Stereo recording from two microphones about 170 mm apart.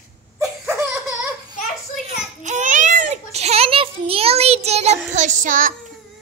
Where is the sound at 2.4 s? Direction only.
45° right (ahead or behind).